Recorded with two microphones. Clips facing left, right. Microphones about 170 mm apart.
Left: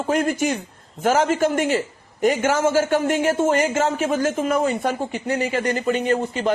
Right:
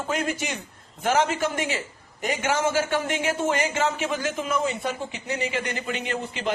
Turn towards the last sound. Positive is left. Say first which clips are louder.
# left 9 dB
turn(degrees=45)  # may be behind; listen again after turning